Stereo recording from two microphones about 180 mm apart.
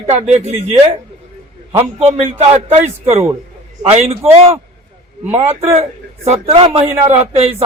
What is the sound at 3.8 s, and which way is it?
Speech, 35° right (ahead or behind).